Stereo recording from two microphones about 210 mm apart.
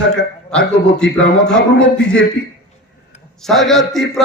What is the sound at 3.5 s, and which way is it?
Speech, centre (ahead or behind).